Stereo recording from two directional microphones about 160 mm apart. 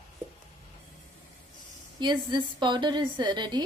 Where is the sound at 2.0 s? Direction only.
30° right (ahead or behind).